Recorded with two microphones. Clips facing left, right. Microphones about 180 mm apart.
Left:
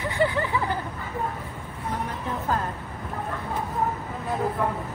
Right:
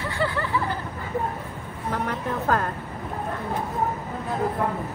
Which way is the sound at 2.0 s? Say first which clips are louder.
Right 5 dB; 70° right (ahead or behind).